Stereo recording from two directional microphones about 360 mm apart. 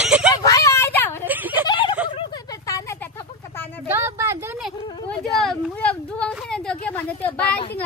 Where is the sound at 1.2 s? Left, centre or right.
Centre.